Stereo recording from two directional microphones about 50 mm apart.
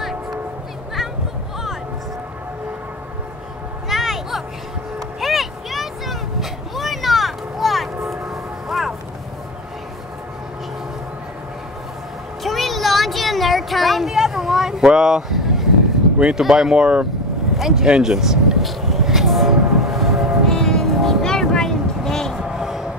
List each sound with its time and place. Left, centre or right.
3.9 s vehicle: centre
8.6 s music: centre
12.4 s a sound: centre
16.3 s speech: centre
16.7 s speech: centre
17.6 s speech: centre
17.8 s speech: centre
18.1 s a sound: centre
19.8 s train: centre
20.4 s vehicle: centre
22.3 s a sound: centre